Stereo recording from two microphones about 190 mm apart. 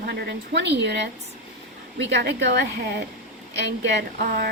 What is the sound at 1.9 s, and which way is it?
A woman's voice, 65° right (ahead or behind).